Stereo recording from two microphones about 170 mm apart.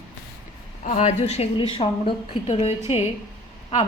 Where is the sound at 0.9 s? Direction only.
40° left (ahead or behind).